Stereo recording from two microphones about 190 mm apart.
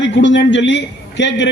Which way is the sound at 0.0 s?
75° left (ahead or behind).